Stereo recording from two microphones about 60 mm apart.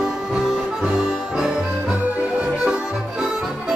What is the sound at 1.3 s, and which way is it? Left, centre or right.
Accordion, centre.